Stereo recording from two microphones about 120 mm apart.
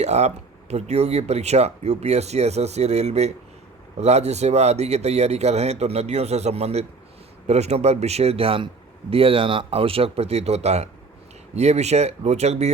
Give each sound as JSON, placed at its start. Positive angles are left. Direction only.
{"t": 0.0, "sound": "a man's voice", "side_deg": -65}